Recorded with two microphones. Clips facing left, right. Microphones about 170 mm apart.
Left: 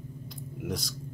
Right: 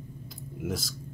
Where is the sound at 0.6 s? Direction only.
5° right (ahead or behind).